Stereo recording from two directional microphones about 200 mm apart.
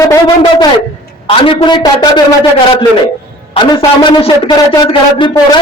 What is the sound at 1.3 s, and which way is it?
Speech, 30° left (ahead or behind).